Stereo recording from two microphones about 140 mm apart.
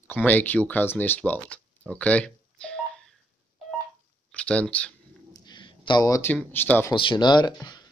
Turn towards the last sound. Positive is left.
turn(degrees=30)  # may be behind; listen again after turning